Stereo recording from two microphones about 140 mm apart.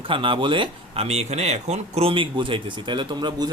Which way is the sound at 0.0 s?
40° right (ahead or behind).